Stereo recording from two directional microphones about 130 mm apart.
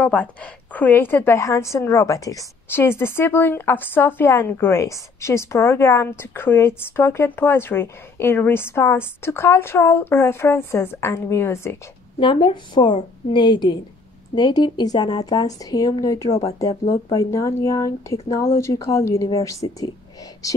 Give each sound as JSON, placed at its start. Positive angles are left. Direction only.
{"t": 0.0, "sound": "a woman's voice", "side_deg": 10}
{"t": 12.2, "sound": "a woman's voice", "side_deg": 40}
{"t": 16.3, "sound": "speech", "side_deg": 50}
{"t": 16.5, "sound": "a woman's voice", "side_deg": 25}